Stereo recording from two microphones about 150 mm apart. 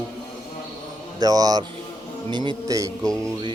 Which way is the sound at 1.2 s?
25° right (ahead or behind).